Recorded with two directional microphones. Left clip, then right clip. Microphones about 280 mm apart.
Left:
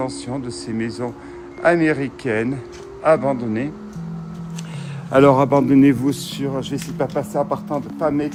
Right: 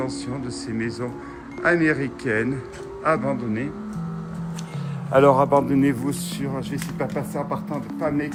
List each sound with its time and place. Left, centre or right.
1.6 s a man's voice: centre
5.1 s speech: left